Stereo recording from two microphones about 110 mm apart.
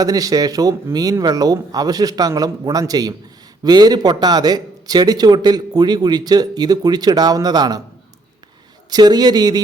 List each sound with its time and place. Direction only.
0.0 s speech: 35° right (ahead or behind)
8.9 s speech: 40° right (ahead or behind)